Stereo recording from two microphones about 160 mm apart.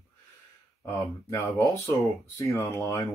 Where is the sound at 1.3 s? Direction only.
15° left (ahead or behind).